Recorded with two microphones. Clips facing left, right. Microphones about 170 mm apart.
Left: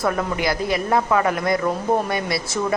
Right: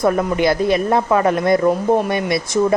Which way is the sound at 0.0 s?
20° right (ahead or behind).